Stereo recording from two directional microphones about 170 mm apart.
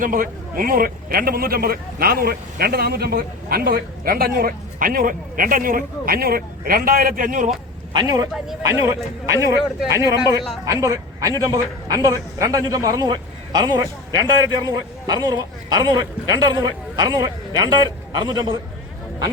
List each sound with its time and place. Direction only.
0.0 s a man's voice: 55° right (ahead or behind)
7.9 s a man's voice: 20° right (ahead or behind)